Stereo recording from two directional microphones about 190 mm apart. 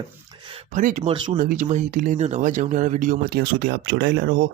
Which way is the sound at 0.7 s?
45° right (ahead or behind).